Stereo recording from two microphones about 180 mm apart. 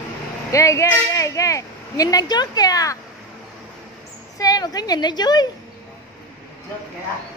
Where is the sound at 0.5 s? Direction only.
15° left (ahead or behind).